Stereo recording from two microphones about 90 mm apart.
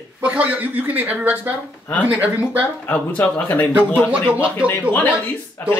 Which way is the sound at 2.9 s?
15° left (ahead or behind).